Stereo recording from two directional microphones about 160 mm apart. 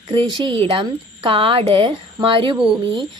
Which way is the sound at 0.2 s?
30° right (ahead or behind).